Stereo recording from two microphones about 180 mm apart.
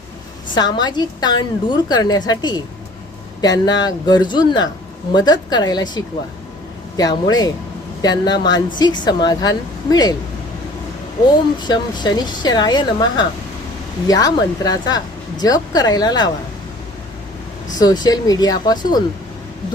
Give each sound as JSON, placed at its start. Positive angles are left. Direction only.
{"t": 0.5, "sound": "speech", "side_deg": 25}
{"t": 11.6, "sound": "speech", "side_deg": 25}
{"t": 17.7, "sound": "speech", "side_deg": 25}